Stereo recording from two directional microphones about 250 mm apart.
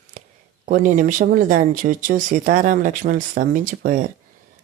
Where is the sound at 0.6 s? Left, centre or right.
Right.